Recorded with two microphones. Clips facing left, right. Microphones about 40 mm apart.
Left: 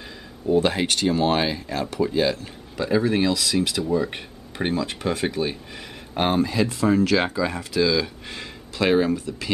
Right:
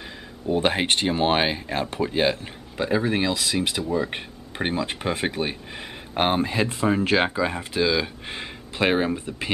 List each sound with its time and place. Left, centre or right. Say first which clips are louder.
0.5 s speech: left 1 dB; right
2.8 s speech: left 2 dB; right